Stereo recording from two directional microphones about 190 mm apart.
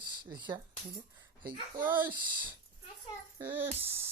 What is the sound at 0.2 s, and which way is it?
Speech, 25° right (ahead or behind).